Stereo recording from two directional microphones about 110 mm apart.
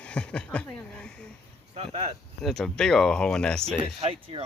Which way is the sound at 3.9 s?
55° right (ahead or behind).